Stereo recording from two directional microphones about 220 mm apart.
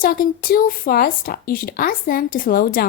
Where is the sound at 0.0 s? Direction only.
40° left (ahead or behind).